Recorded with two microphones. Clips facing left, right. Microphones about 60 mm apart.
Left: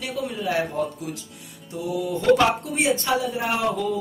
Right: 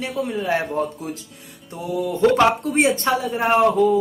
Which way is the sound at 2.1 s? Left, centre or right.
Right.